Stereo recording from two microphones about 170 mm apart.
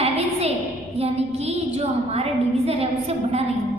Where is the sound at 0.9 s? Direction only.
40° right (ahead or behind).